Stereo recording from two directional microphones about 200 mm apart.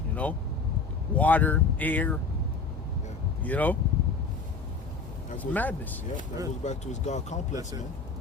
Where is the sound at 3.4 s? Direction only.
10° left (ahead or behind).